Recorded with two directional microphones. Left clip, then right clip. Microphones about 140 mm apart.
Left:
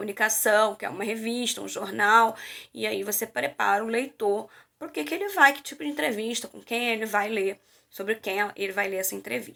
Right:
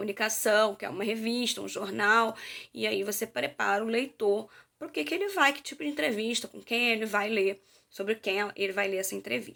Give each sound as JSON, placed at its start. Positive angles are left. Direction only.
{"t": 0.0, "sound": "speech", "side_deg": -40}